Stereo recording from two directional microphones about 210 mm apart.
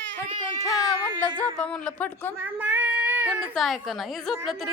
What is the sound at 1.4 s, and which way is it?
Speech, 5° left (ahead or behind).